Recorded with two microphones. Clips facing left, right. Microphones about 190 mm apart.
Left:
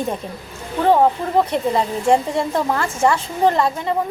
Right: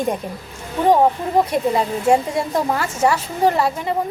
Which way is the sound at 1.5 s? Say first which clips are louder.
Right 1 dB; 10° right (ahead or behind).